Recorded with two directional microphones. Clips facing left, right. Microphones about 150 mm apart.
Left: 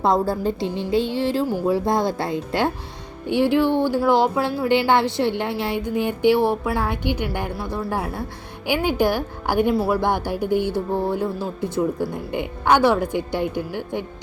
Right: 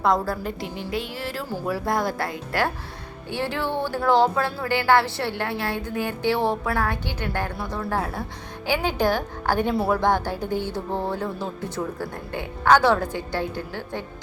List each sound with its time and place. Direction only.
0.0 s a woman's voice: 25° left (ahead or behind)